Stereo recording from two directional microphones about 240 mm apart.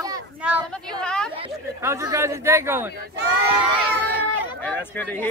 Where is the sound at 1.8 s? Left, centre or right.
Centre.